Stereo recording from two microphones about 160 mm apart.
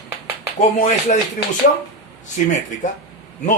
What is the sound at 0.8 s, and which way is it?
Speech, 50° left (ahead or behind).